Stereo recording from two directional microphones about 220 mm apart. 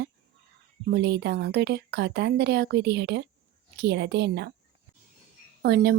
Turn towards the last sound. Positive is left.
turn(degrees=-45)  # may be behind; listen again after turning